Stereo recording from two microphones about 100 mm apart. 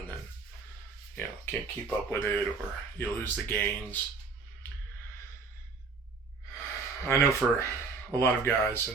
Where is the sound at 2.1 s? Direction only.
20° left (ahead or behind).